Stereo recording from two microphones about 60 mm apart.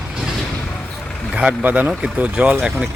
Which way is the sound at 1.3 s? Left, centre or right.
Centre.